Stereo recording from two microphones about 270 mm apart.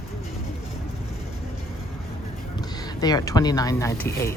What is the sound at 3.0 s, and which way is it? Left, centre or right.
Speech, centre.